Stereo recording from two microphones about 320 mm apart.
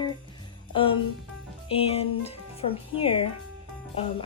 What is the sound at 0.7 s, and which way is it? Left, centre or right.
Music, centre.